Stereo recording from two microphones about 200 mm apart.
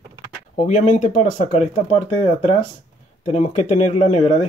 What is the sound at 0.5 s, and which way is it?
Speech, 35° left (ahead or behind).